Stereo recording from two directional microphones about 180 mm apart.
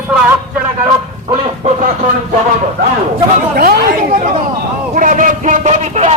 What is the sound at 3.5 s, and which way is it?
Speech, 55° right (ahead or behind).